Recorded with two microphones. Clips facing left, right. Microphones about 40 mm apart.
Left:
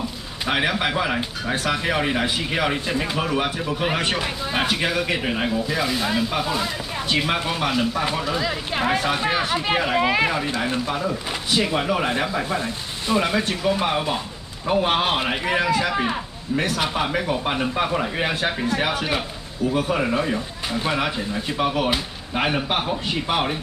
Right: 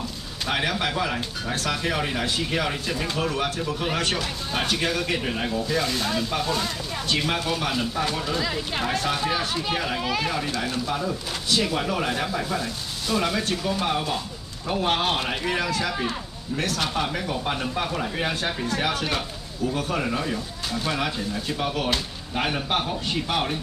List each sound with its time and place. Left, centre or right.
0.5 s speech: centre
7.7 s speech: centre